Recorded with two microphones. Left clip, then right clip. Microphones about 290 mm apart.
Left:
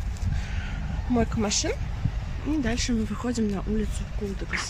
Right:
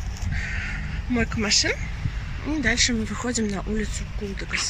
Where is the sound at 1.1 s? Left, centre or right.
Centre.